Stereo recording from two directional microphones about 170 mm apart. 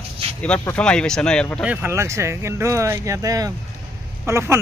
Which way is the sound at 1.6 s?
10° right (ahead or behind).